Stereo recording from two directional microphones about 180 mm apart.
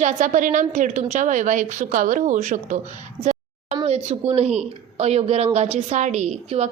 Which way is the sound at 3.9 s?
35° right (ahead or behind).